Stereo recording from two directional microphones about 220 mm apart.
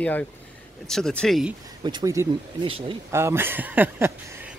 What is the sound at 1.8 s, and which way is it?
Speech, 15° right (ahead or behind).